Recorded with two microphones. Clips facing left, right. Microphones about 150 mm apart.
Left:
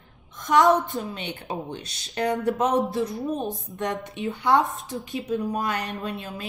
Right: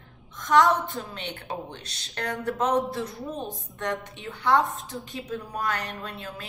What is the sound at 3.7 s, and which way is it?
A woman's voice, 15° left (ahead or behind).